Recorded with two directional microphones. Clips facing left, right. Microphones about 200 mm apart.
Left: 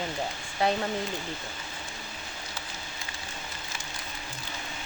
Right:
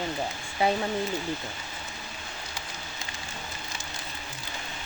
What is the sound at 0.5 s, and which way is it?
Speech, 5° right (ahead or behind).